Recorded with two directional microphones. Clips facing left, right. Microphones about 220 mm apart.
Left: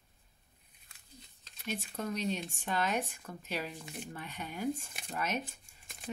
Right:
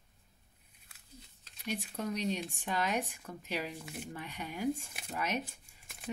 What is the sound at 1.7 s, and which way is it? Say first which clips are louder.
Speech: right 1 dB; 10° right (ahead or behind).